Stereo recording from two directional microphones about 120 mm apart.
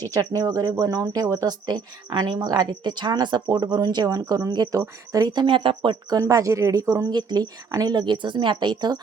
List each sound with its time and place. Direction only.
0.0 s speech: 30° right (ahead or behind)